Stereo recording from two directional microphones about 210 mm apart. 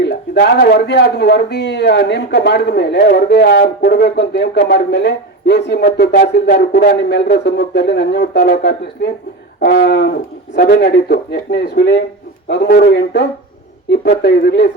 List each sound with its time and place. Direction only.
0.0 s speech: 50° left (ahead or behind)